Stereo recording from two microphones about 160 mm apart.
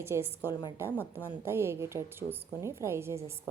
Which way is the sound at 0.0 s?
15° right (ahead or behind).